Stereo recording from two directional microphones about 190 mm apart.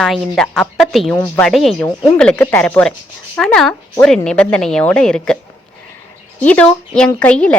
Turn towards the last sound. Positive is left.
turn(degrees=5)  # may be behind; listen again after turning